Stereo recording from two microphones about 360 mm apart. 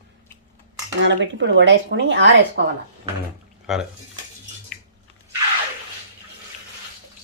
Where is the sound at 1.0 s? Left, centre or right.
Right.